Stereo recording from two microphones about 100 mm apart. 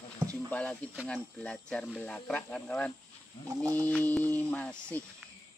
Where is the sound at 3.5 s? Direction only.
35° right (ahead or behind).